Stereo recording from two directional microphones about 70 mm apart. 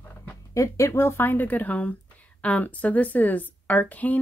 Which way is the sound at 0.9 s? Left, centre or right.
Left.